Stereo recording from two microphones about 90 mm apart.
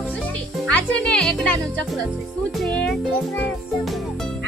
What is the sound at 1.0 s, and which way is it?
Speech, 10° left (ahead or behind).